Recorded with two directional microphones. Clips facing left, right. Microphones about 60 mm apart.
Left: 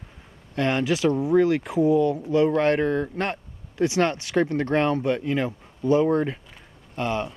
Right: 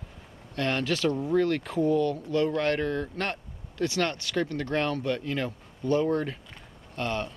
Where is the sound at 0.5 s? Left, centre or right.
Centre.